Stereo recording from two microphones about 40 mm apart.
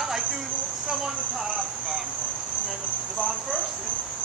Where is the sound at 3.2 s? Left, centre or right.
Right.